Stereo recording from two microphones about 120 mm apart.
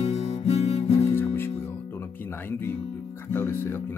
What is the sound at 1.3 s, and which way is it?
Music, 20° left (ahead or behind).